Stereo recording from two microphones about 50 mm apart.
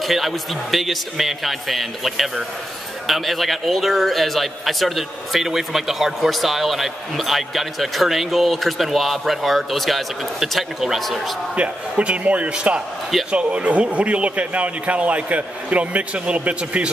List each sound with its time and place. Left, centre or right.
0.0 s a man's voice: centre
11.5 s speech: right